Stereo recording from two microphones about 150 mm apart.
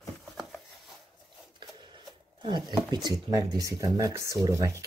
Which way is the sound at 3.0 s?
25° right (ahead or behind).